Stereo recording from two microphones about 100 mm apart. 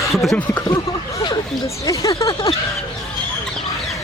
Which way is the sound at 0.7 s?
40° left (ahead or behind).